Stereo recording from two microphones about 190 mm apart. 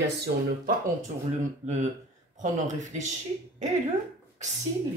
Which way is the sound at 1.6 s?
40° right (ahead or behind).